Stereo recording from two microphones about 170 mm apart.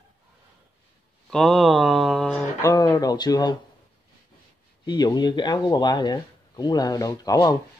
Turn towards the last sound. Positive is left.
turn(degrees=20)  # may be behind; listen again after turning